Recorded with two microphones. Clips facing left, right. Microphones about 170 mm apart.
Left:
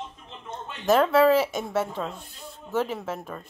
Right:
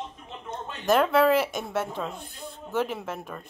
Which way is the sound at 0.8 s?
5° left (ahead or behind).